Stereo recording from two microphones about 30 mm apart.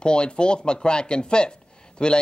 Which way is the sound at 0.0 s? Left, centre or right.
Left.